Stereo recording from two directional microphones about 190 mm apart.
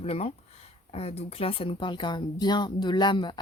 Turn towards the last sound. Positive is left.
turn(degrees=25)  # may be behind; listen again after turning